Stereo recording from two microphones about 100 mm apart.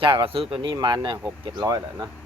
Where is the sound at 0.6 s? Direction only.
50° right (ahead or behind).